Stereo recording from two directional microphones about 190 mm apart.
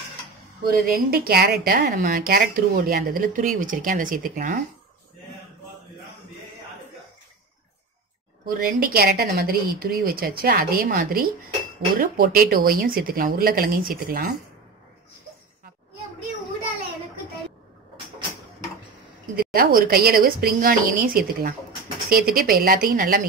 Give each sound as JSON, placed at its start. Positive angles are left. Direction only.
{"t": 0.7, "sound": "a woman's voice", "side_deg": -50}
{"t": 8.5, "sound": "a woman's voice", "side_deg": -50}
{"t": 19.3, "sound": "a woman's voice", "side_deg": -50}